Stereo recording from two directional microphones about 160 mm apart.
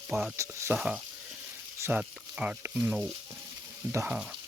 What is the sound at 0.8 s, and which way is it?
Speech, 5° right (ahead or behind).